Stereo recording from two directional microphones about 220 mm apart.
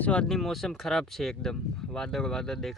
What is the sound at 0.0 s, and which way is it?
Speech, 5° left (ahead or behind).